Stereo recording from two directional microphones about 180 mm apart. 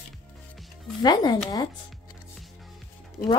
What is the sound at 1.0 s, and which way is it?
Speech, 20° left (ahead or behind).